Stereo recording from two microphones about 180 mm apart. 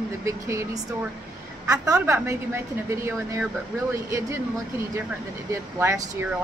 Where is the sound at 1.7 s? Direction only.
20° right (ahead or behind).